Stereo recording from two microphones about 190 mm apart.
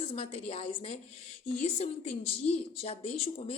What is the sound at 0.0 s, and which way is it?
Speech, 30° left (ahead or behind).